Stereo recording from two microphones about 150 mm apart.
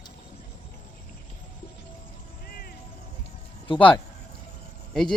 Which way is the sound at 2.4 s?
80° left.